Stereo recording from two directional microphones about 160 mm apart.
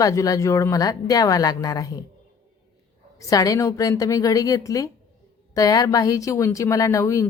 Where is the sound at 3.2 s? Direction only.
20° left (ahead or behind).